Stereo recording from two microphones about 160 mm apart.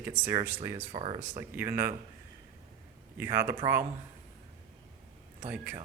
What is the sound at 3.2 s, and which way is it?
Speech, 15° right (ahead or behind).